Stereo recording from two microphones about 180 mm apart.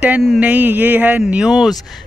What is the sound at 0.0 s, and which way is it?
Speech, 5° right (ahead or behind).